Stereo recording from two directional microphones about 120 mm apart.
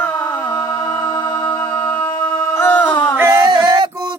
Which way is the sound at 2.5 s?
15° left (ahead or behind).